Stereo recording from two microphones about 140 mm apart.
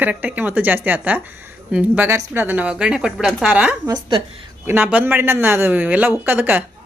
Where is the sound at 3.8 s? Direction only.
35° right (ahead or behind).